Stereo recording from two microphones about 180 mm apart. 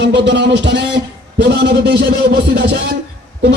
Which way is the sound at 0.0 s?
75° right (ahead or behind).